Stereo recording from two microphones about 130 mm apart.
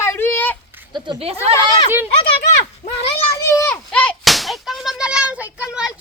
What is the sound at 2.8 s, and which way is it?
Speech, 50° left (ahead or behind).